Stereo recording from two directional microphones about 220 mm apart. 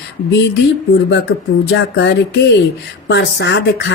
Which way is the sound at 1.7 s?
55° left (ahead or behind).